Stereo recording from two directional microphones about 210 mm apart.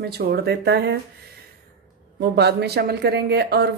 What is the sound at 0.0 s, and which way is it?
Speech, 50° right (ahead or behind).